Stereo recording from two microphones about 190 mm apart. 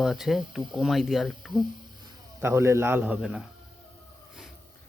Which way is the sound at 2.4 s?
15° right (ahead or behind).